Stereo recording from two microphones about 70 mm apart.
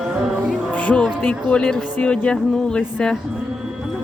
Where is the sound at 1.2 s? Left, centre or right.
Centre.